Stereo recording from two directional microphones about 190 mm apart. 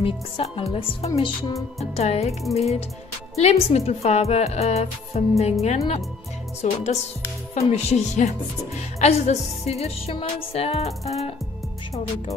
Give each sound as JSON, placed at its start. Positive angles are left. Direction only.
{"t": 0.0, "sound": "speech", "side_deg": 30}